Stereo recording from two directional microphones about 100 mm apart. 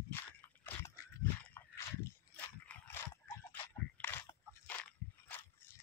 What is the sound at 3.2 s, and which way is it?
Horse, 25° left (ahead or behind).